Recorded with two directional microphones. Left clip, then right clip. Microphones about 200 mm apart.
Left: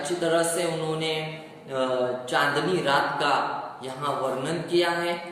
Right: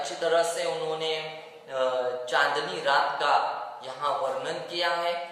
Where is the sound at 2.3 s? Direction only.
15° right (ahead or behind).